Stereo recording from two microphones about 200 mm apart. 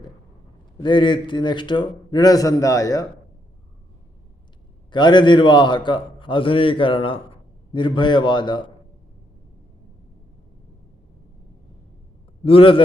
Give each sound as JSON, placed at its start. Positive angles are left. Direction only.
{"t": 0.8, "sound": "a man's voice", "side_deg": 25}
{"t": 4.9, "sound": "a man's voice", "side_deg": 20}
{"t": 12.5, "sound": "a man's voice", "side_deg": 25}